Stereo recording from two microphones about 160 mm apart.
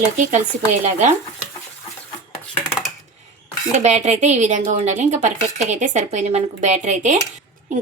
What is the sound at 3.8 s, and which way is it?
Speech, 45° right (ahead or behind).